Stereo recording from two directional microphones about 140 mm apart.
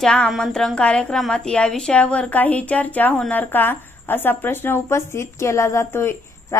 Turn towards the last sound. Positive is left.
turn(degrees=20)  # may be behind; listen again after turning